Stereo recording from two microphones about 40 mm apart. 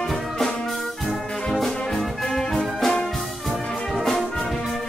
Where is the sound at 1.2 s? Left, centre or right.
Centre.